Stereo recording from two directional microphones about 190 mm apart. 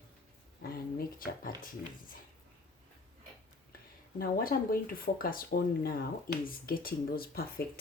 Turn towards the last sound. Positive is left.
turn(degrees=55)  # may be behind; listen again after turning